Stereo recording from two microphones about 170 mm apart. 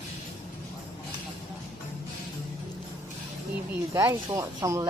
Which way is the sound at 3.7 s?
15° right (ahead or behind).